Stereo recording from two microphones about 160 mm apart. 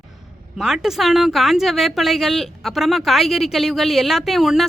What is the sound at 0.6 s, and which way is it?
A woman's voice, centre (ahead or behind).